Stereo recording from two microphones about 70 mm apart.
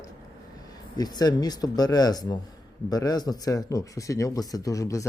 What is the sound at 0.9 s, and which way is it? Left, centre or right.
Speech, left.